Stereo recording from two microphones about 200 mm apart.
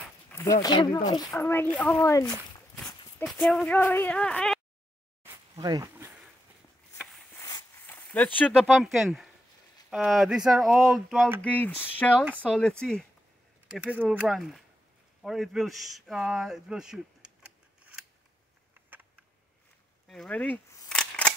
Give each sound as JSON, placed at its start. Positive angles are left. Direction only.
{"t": 0.3, "sound": "speech", "side_deg": 15}
{"t": 2.9, "sound": "a sound", "side_deg": 15}
{"t": 3.3, "sound": "speech", "side_deg": 5}
{"t": 5.2, "sound": "a sound", "side_deg": -15}
{"t": 7.3, "sound": "a sound", "side_deg": 15}
{"t": 9.8, "sound": "speech", "side_deg": 0}
{"t": 13.7, "sound": "speech", "side_deg": -5}
{"t": 20.1, "sound": "speech", "side_deg": 5}
{"t": 20.9, "sound": "scissors", "side_deg": 5}